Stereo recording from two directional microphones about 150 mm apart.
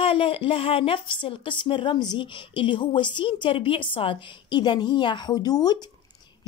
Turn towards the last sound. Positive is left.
turn(degrees=25)  # may be behind; listen again after turning